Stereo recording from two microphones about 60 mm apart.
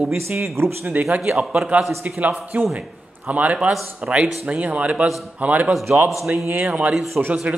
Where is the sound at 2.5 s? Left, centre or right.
Right.